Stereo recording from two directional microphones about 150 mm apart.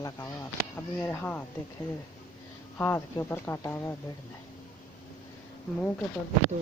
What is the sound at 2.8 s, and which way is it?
Speech, 20° left (ahead or behind).